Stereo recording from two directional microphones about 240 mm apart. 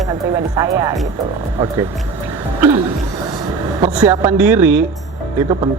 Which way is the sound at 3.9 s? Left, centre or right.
Centre.